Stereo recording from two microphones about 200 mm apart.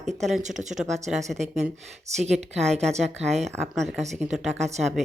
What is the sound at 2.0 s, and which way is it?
Speech, 35° right (ahead or behind).